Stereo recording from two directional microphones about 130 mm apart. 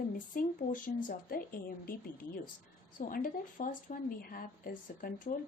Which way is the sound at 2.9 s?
90° left.